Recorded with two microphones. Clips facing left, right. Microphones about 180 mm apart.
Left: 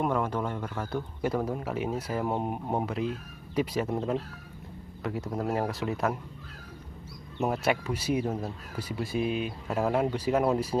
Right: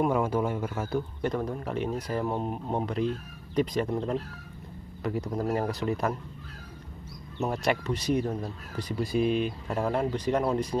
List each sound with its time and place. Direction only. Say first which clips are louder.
0.0 s a man's voice: right 3 dB; 10° right (ahead or behind)
1.2 s speech: left 1 dB; 10° left (ahead or behind)
7.3 s speech: even; 5° left (ahead or behind)